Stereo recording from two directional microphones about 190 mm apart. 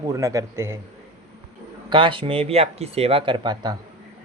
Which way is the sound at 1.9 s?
25° right (ahead or behind).